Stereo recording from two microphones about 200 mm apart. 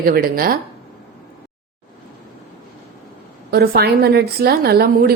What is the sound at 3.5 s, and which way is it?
A woman's voice, 50° right (ahead or behind).